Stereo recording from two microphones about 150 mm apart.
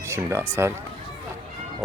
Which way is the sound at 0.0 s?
20° right (ahead or behind).